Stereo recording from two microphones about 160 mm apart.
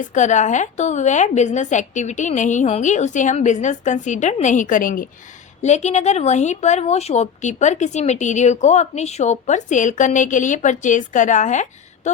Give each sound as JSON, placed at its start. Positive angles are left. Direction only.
{"t": 0.1, "sound": "speech", "side_deg": 50}
{"t": 5.6, "sound": "speech", "side_deg": 45}